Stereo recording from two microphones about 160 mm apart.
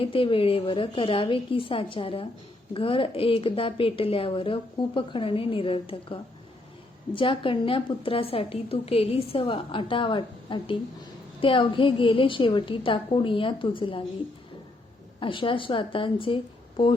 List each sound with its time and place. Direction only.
0.0 s a woman's voice: 35° left (ahead or behind)
15.2 s a woman's voice: 30° left (ahead or behind)